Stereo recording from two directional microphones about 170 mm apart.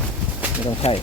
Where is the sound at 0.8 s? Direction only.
35° left (ahead or behind).